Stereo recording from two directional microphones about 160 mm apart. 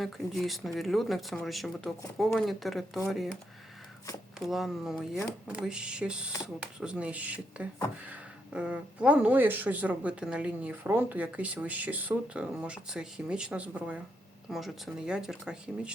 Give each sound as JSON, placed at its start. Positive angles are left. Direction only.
{"t": 0.0, "sound": "speech", "side_deg": 0}
{"t": 4.4, "sound": "speech", "side_deg": 0}